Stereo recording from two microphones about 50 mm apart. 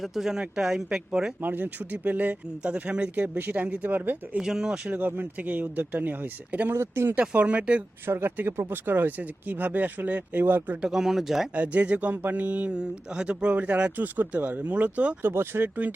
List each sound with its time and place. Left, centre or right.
0.0 s speech: centre
1.4 s speech: right
3.2 s speech: right
4.4 s speech: centre
4.9 s speech: right
5.4 s speech: right
6.7 s speech: right
7.2 s speech: right
8.0 s speech: right
10.8 s speech: centre
11.5 s speech: right
13.9 s speech: right
15.2 s speech: right
15.6 s speech: right